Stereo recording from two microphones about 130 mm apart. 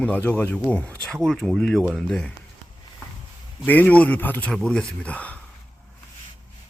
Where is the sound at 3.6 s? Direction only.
10° left (ahead or behind).